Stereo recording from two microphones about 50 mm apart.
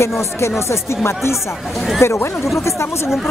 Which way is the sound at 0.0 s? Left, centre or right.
Left.